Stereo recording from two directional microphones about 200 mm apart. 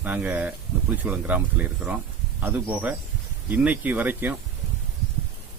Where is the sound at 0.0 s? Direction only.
10° right (ahead or behind).